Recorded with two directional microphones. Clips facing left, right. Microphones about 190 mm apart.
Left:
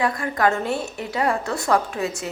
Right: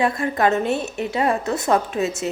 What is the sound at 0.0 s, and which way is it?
A woman's voice, 25° right (ahead or behind).